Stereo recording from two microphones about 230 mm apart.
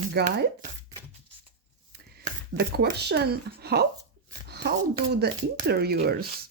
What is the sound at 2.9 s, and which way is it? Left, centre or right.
Speech, right.